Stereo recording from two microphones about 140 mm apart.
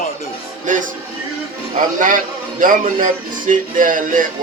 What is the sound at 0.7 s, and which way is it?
Speech, 65° right (ahead or behind).